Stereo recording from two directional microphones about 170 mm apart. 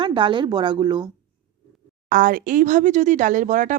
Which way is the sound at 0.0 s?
30° right (ahead or behind).